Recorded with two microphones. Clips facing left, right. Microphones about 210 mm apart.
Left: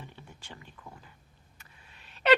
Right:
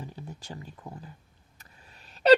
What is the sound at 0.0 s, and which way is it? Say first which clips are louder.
Speech: right 7 dB; 40° right (ahead or behind).